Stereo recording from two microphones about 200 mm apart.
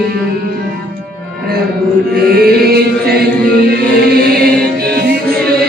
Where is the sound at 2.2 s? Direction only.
50° right (ahead or behind).